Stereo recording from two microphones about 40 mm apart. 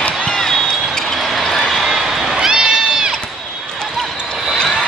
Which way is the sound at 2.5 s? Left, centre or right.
Right.